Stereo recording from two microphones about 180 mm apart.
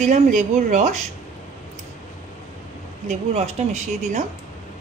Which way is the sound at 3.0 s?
35° right (ahead or behind).